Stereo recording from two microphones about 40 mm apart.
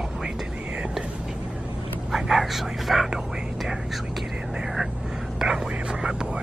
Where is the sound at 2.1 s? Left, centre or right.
Centre.